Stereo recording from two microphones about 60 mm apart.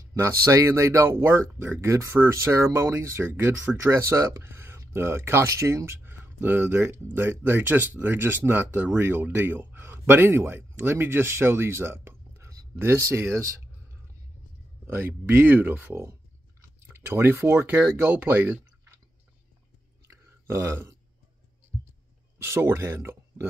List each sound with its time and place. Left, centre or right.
0.2 s speech: right
14.9 s speech: right
20.4 s a sound: right
22.4 s speech: right